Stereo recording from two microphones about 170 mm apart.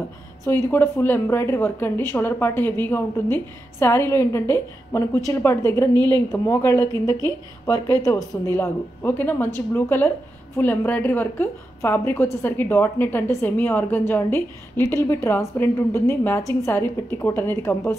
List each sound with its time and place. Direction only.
0.5 s a woman's voice: 15° left (ahead or behind)